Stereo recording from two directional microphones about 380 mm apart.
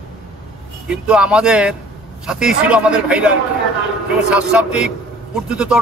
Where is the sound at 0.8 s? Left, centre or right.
Centre.